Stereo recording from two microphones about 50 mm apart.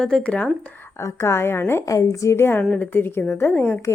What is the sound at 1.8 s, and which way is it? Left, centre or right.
Speech, left.